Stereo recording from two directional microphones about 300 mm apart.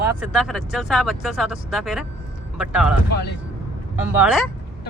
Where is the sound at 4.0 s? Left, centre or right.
Centre.